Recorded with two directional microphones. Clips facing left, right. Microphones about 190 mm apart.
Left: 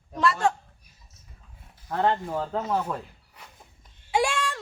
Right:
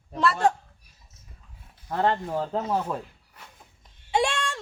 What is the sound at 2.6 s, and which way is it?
Speech, 15° right (ahead or behind).